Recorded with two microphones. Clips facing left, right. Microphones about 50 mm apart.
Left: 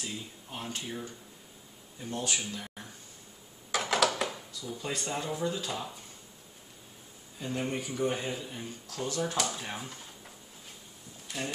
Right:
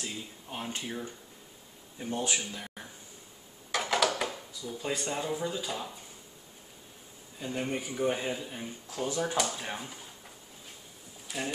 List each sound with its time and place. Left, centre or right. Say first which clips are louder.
0.0 s speech: even; centre
2.0 s speech: right 2 dB; right
2.3 s speech: right 1 dB; centre
3.7 s a sound: even; centre
7.3 s speech: even; centre
11.2 s speech: right 1 dB; centre